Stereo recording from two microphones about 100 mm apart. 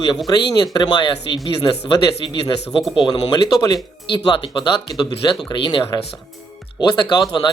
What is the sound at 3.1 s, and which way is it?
Speech, 45° left (ahead or behind).